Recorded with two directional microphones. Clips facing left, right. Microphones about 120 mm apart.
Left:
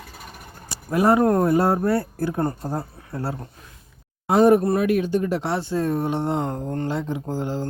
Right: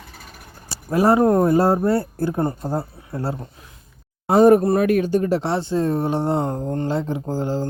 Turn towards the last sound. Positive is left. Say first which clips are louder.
# right 3 dB
turn(degrees=-35)  # may be behind; listen again after turning